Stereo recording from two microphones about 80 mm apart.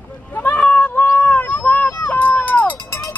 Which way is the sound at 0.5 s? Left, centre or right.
Centre.